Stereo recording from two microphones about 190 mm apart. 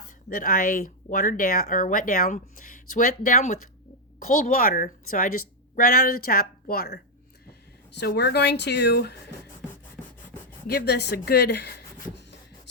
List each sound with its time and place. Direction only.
0.3 s a woman's voice: 45° left (ahead or behind)
10.7 s speech: 55° left (ahead or behind)